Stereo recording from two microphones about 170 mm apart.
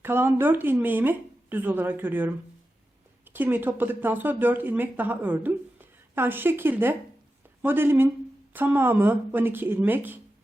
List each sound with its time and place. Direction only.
0.0 s speech: 15° right (ahead or behind)